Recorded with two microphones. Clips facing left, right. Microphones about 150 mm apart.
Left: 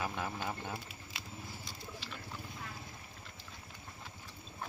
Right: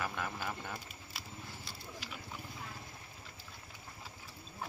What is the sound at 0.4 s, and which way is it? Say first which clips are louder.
Speech: left 1 dB; 20° left (ahead or behind).